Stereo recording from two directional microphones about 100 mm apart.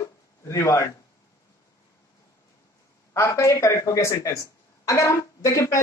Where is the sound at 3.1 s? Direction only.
30° left (ahead or behind).